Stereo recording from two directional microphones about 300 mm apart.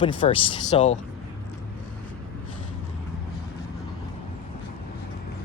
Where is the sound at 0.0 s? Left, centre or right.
Centre.